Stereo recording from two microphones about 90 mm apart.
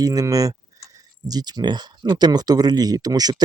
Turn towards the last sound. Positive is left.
turn(degrees=-45)  # may be behind; listen again after turning